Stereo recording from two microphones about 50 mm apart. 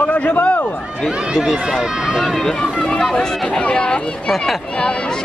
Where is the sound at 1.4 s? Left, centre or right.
Centre.